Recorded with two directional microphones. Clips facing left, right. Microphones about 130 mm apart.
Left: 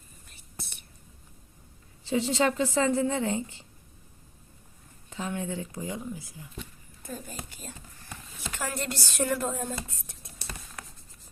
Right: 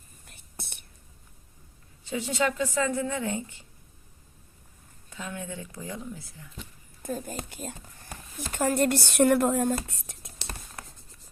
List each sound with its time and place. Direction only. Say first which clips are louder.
0.3 s whispering: right 1 dB; 60° right (ahead or behind)
2.0 s a woman's voice: left 2 dB; 30° left (ahead or behind)
5.0 s a woman's voice: left 4 dB; 30° left (ahead or behind)
7.0 s speech: right 6 dB; 50° right (ahead or behind)
8.7 s speech: right 10 dB; 55° right (ahead or behind); by 10.4 s 80° right